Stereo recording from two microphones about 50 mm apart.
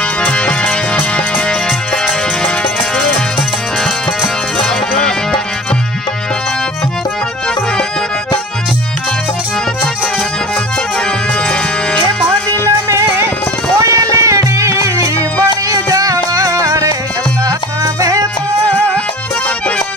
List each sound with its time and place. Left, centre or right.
0.2 s music: left
4.6 s music: centre
13.7 s music: right